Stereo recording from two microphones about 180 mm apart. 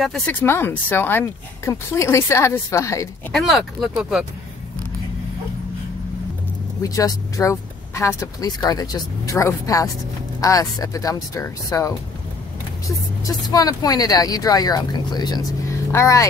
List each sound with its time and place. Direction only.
0.3 s speech: 10° left (ahead or behind)
3.3 s speech: centre (ahead or behind)
6.8 s speech: 20° left (ahead or behind)
13.2 s speech: 20° left (ahead or behind)